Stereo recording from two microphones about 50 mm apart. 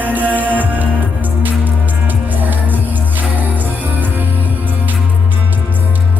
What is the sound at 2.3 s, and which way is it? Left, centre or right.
Music, right.